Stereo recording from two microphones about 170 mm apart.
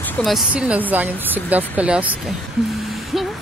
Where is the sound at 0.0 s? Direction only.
Centre (ahead or behind).